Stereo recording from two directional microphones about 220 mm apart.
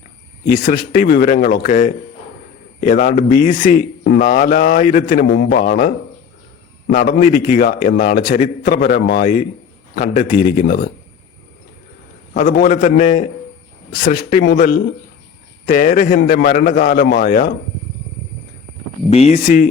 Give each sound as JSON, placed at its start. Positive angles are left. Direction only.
{"t": 0.4, "sound": "a man's voice", "side_deg": 40}
{"t": 5.3, "sound": "speech", "side_deg": 50}
{"t": 5.5, "sound": "a man's voice", "side_deg": 40}
{"t": 6.9, "sound": "a man's voice", "side_deg": 40}
{"t": 12.3, "sound": "a man's voice", "side_deg": 35}
{"t": 19.1, "sound": "a man's voice", "side_deg": 30}